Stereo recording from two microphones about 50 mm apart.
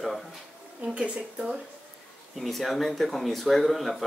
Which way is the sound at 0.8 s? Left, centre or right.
Centre.